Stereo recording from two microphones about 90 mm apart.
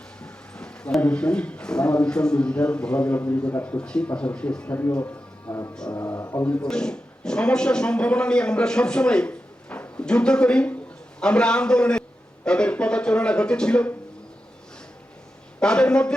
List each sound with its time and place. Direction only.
0.2 s speech: 10° left (ahead or behind)
4.8 s music: 20° left (ahead or behind)
6.4 s a man's voice: 10° left (ahead or behind)
15.6 s speech: 10° left (ahead or behind)